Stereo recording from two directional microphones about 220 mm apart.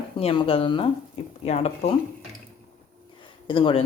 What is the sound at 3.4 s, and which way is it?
Speech, 25° left (ahead or behind).